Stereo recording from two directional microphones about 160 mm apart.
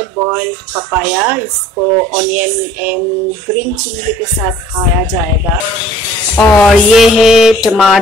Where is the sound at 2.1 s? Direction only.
10° right (ahead or behind).